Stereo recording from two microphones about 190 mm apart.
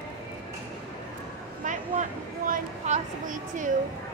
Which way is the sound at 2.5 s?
40° right (ahead or behind).